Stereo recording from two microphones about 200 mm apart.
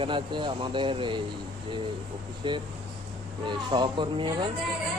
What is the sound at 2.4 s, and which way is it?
Speech, 25° right (ahead or behind).